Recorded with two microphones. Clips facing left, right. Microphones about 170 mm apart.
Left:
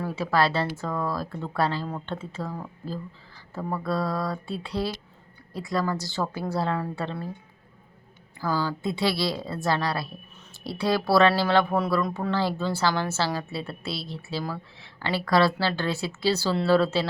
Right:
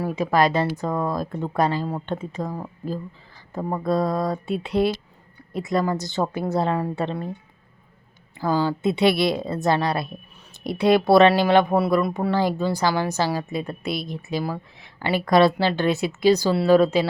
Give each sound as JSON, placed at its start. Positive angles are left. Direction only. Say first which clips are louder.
{"t": 0.0, "sound": "a woman's voice", "louder": "right 4 dB", "side_deg": -15}
{"t": 8.4, "sound": "a woman's voice", "louder": "right 5 dB", "side_deg": -20}